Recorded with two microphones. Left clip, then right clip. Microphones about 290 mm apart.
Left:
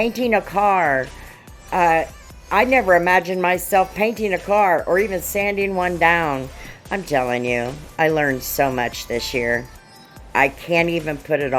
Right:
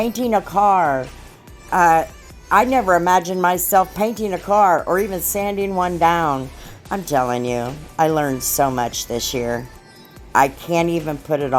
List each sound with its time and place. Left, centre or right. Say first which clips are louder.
0.0 s speech: even; right
2.8 s speech: left 1 dB; centre
3.1 s speech: right 1 dB; right